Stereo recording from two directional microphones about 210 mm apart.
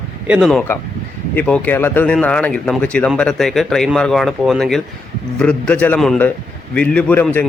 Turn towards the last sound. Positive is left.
turn(degrees=10)  # may be behind; listen again after turning